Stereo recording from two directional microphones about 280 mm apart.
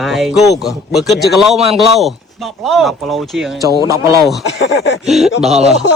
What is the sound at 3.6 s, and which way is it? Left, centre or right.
Speech, centre.